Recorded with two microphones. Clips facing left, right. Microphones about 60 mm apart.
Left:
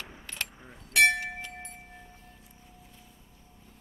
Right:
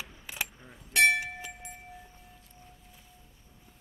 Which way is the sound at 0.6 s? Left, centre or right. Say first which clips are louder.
Left 2 dB; centre.